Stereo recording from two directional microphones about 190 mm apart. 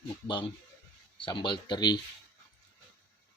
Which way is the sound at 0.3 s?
25° left (ahead or behind).